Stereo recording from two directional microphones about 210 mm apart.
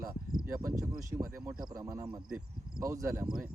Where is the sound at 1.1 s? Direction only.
15° right (ahead or behind).